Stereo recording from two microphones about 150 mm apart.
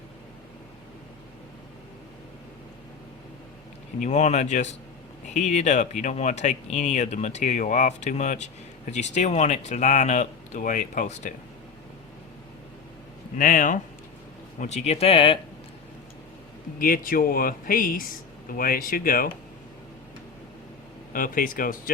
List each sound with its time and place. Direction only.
4.0 s speech: 50° left (ahead or behind)
13.3 s speech: 60° left (ahead or behind)
14.6 s speech: 45° left (ahead or behind)
16.7 s speech: 70° left (ahead or behind)
21.1 s speech: 70° left (ahead or behind)